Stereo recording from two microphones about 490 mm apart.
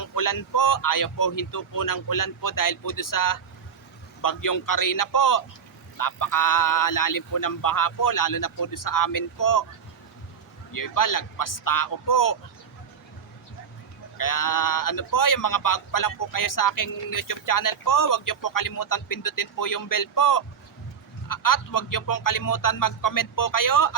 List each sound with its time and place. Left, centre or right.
0.0 s speech: left
10.7 s speech: left
14.2 s speech: left